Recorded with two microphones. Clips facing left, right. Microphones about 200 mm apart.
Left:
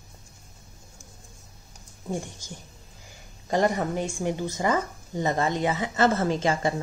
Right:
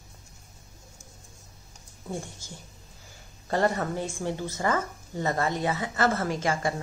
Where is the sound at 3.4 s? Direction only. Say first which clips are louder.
Left 2 dB; 15° left (ahead or behind).